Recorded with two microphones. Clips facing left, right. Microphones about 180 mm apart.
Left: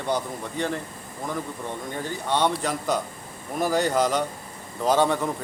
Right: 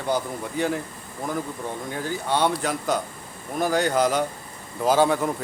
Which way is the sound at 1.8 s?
5° right (ahead or behind).